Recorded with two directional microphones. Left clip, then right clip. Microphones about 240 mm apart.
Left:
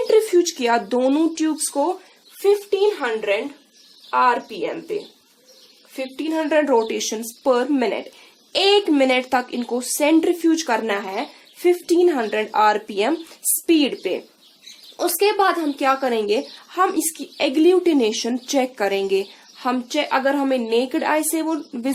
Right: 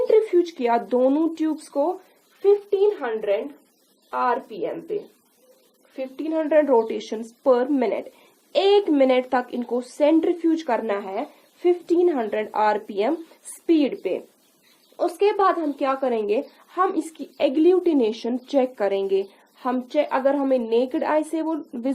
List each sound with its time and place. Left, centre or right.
0.1 s speech: centre
6.0 s speech: centre